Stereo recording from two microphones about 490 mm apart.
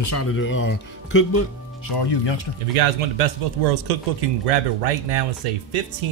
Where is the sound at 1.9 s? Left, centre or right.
Left.